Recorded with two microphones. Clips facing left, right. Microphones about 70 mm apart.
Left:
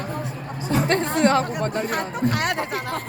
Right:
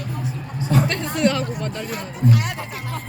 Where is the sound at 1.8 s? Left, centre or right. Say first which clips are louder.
Right 1 dB; left.